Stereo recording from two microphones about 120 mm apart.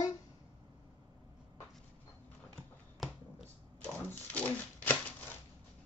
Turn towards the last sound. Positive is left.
turn(degrees=15)  # may be behind; listen again after turning